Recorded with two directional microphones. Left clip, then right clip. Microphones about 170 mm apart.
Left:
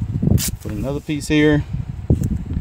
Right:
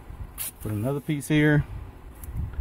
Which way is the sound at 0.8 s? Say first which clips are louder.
Left 6 dB; 35° left (ahead or behind).